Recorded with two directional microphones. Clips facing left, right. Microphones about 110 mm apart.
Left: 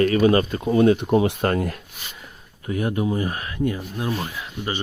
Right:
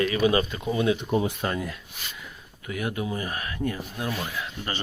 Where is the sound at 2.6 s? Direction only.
35° left (ahead or behind).